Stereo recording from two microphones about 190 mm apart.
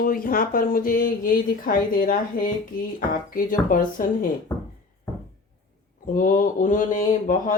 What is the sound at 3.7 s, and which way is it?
Speech, 45° left (ahead or behind).